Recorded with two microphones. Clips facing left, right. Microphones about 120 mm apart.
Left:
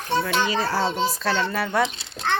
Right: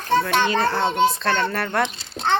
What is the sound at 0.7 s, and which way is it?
Speech, 5° left (ahead or behind).